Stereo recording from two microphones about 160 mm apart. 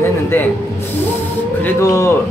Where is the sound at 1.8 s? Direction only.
20° left (ahead or behind).